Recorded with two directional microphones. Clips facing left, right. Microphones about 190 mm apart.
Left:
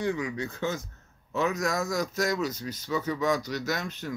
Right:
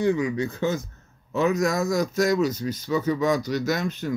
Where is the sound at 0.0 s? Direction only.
20° right (ahead or behind).